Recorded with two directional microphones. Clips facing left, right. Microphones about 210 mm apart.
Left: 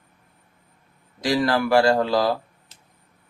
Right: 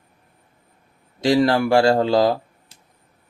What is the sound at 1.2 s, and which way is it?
Speech, 25° right (ahead or behind).